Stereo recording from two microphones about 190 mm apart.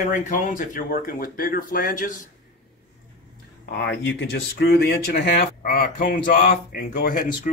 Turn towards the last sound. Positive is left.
turn(degrees=50)  # may be behind; listen again after turning